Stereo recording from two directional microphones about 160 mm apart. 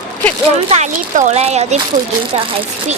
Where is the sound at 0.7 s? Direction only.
45° right (ahead or behind).